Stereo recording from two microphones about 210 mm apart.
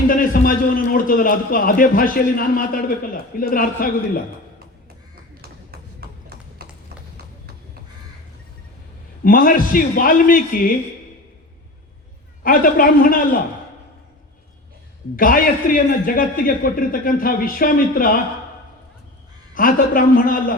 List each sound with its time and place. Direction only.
0.1 s a man's voice: 40° left (ahead or behind)
5.7 s a sound: 50° right (ahead or behind)
9.2 s a man's voice: 45° left (ahead or behind)
12.4 s a man's voice: 40° left (ahead or behind)
15.1 s a man's voice: 40° left (ahead or behind)
19.5 s a man's voice: 40° left (ahead or behind)